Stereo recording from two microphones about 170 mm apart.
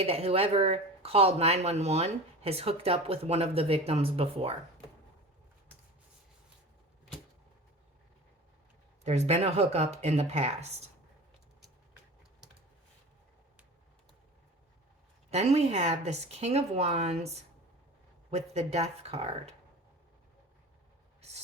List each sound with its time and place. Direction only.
0.0 s speech: 35° right (ahead or behind)
9.0 s speech: 40° right (ahead or behind)
15.3 s speech: 40° right (ahead or behind)
18.3 s speech: 40° right (ahead or behind)
21.2 s a sound: 40° right (ahead or behind)